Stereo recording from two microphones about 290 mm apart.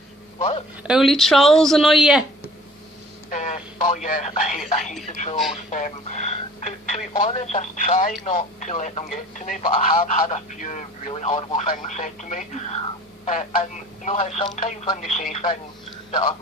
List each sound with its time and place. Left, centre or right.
0.3 s a man's voice: left
0.8 s speech: centre
3.2 s speech: left